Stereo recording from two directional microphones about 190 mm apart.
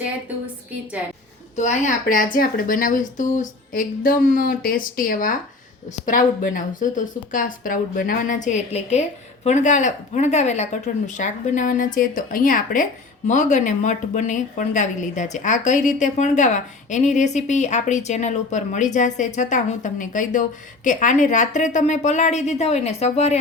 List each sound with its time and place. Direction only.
1.5 s a woman's voice: 40° left (ahead or behind)